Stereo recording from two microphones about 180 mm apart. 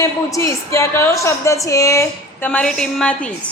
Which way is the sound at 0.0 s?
15° left (ahead or behind).